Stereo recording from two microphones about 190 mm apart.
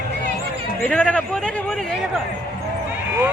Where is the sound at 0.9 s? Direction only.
5° left (ahead or behind).